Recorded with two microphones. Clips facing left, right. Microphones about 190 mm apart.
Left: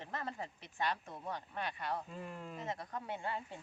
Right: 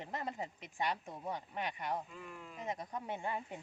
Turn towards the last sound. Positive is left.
turn(degrees=-15)  # may be behind; listen again after turning